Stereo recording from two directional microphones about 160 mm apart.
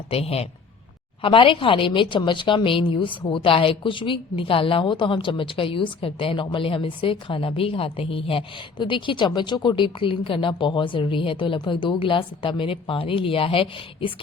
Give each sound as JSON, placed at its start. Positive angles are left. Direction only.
{"t": 0.1, "sound": "a woman's voice", "side_deg": 40}